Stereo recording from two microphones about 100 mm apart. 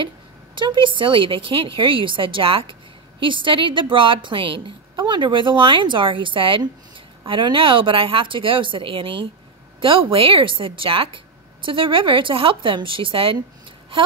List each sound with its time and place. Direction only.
0.6 s a woman's voice: 55° right (ahead or behind)